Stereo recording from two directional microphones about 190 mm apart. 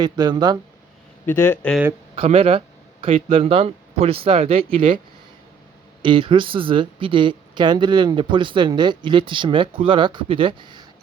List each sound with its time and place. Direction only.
0.0 s speech: 20° right (ahead or behind)
1.3 s speech: 10° left (ahead or behind)
2.1 s speech: 30° right (ahead or behind)
6.0 s speech: 25° right (ahead or behind)